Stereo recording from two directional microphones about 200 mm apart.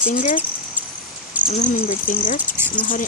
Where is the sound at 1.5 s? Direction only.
40° left (ahead or behind).